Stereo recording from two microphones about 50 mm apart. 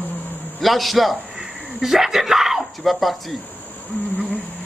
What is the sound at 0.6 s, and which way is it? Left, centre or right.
Speech, centre.